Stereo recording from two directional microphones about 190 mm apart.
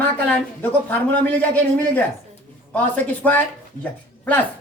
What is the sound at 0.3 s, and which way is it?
A woman's voice, 10° left (ahead or behind).